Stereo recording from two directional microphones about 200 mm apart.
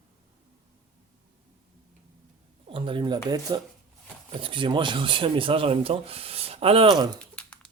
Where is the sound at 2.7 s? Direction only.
25° right (ahead or behind).